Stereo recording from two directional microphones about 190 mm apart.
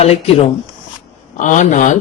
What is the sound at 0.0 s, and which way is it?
A man's voice, 30° left (ahead or behind).